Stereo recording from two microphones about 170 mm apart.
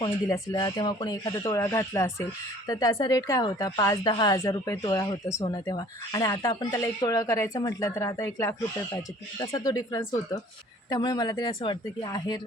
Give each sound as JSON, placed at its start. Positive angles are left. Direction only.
{"t": 0.0, "sound": "speech", "side_deg": 25}
{"t": 9.6, "sound": "speech", "side_deg": 20}